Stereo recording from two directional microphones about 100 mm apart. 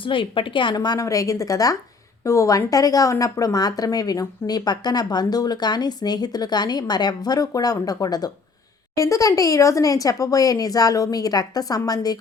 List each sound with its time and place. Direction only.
0.0 s a woman's voice: 60° left (ahead or behind)
1.0 s speech: 35° left (ahead or behind)